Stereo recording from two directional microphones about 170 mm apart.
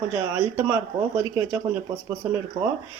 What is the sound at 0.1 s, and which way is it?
Speech, 10° right (ahead or behind).